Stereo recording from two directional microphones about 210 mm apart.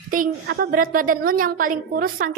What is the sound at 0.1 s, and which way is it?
A woman's voice, 45° right (ahead or behind).